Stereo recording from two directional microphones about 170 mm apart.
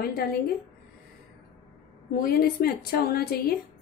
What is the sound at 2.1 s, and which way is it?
A woman's voice, 60° left (ahead or behind).